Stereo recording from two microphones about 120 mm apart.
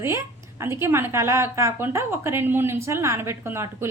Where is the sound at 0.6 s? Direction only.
20° right (ahead or behind).